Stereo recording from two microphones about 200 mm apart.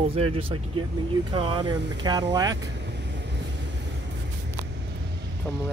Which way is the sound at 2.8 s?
60° right (ahead or behind).